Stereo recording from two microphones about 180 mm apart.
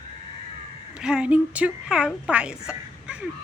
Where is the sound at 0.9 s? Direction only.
5° right (ahead or behind).